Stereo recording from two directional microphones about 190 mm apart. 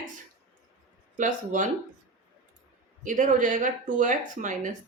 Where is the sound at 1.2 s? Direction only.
40° right (ahead or behind).